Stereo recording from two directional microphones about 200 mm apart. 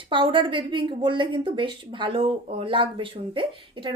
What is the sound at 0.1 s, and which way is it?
A woman's voice, 25° right (ahead or behind).